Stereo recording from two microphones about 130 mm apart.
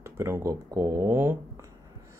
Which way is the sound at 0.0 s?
20° right (ahead or behind).